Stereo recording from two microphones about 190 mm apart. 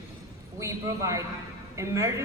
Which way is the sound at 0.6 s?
15° right (ahead or behind).